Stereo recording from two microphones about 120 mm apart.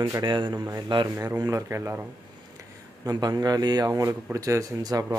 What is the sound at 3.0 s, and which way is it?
A man's voice, 35° right (ahead or behind).